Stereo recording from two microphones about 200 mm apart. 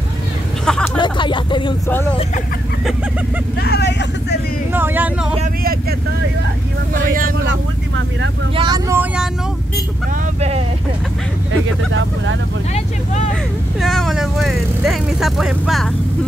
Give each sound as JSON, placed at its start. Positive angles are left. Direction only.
{"t": 0.7, "sound": "speech", "side_deg": 5}
{"t": 0.9, "sound": "speech", "side_deg": 25}
{"t": 3.5, "sound": "speech", "side_deg": 55}
{"t": 4.7, "sound": "speech", "side_deg": -10}
{"t": 5.6, "sound": "speech", "side_deg": -50}
{"t": 7.4, "sound": "speech", "side_deg": -70}
{"t": 8.5, "sound": "speech", "side_deg": -20}
{"t": 11.6, "sound": "speech", "side_deg": -70}
{"t": 12.7, "sound": "speech", "side_deg": 35}
{"t": 13.7, "sound": "speech", "side_deg": 0}